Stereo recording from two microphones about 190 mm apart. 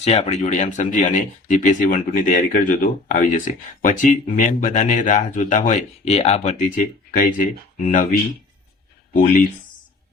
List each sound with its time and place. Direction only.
0.0 s speech: 35° left (ahead or behind)
9.1 s speech: 45° left (ahead or behind)